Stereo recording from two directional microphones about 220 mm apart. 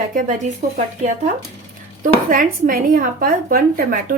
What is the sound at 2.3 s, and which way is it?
A woman's voice, 40° right (ahead or behind).